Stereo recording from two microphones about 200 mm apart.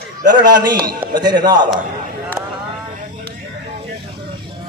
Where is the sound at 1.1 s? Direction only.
20° right (ahead or behind).